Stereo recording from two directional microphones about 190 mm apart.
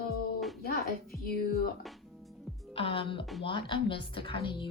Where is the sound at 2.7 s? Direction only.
30° left (ahead or behind).